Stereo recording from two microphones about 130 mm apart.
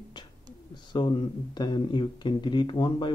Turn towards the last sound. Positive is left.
turn(degrees=40)  # may be behind; listen again after turning